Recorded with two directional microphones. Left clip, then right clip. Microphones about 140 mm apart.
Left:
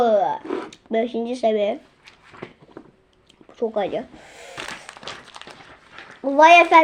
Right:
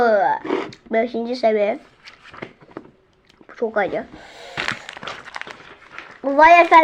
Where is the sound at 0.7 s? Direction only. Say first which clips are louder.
Even; 40° left (ahead or behind).